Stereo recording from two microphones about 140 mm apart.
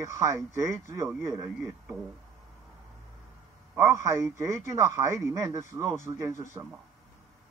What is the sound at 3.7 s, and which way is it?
A man's voice, 20° right (ahead or behind).